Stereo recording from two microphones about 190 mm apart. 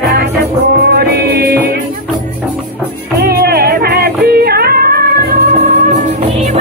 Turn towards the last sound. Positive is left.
turn(degrees=-55)  # may be behind; listen again after turning